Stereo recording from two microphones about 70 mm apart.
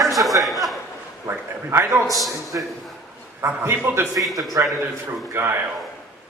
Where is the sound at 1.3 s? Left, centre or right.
Right.